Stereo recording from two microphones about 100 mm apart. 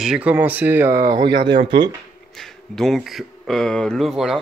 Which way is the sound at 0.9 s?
35° right (ahead or behind).